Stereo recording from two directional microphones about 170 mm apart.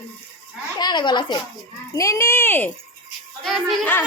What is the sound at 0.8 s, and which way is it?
Speech, 25° left (ahead or behind).